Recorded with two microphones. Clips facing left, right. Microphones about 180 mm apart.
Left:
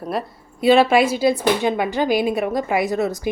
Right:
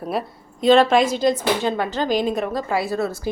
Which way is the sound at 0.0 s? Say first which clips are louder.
Even; centre (ahead or behind).